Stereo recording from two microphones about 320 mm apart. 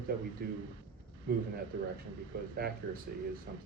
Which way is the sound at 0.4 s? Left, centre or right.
Right.